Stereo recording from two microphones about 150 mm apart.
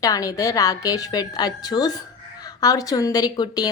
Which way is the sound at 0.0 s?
25° left (ahead or behind).